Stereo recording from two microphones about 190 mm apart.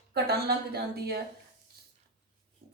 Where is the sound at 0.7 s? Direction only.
55° right (ahead or behind).